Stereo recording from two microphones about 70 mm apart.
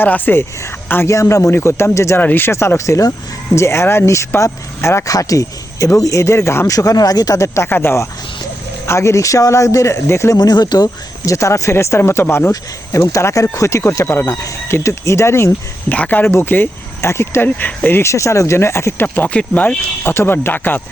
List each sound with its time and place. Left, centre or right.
0.0 s speech: left
1.0 s speech: left
5.1 s speech: left
6.7 s speech: left
7.3 s speech: left
7.7 s speech: left
8.9 s speech: left
10.3 s speech: left
11.3 s speech: left
12.5 s speech: left
15.9 s speech: left
19.0 s speech: left